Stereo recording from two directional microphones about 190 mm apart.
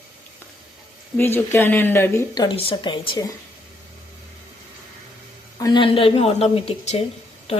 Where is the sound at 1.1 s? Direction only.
10° left (ahead or behind).